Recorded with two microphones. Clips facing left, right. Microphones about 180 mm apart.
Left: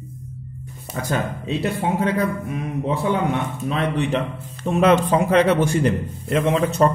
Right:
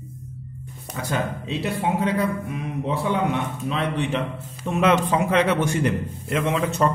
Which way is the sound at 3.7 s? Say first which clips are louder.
Left 3 dB; 45° left (ahead or behind).